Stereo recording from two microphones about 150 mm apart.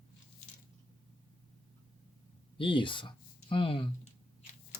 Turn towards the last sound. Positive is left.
turn(degrees=35)  # may be behind; listen again after turning